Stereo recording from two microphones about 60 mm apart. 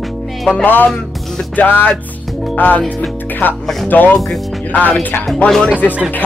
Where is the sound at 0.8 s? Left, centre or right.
Centre.